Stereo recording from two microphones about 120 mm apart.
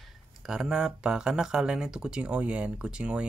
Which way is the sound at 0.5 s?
5° right (ahead or behind).